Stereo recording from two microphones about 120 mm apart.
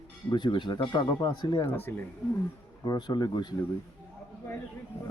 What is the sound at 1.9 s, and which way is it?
Speech, 20° left (ahead or behind).